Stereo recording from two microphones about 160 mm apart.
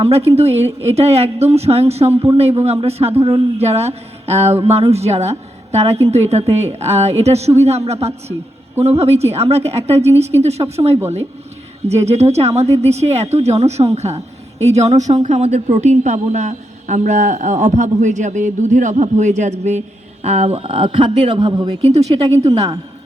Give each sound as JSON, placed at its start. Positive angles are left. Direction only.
{"t": 0.0, "sound": "speech", "side_deg": -40}
{"t": 21.8, "sound": "speech", "side_deg": -40}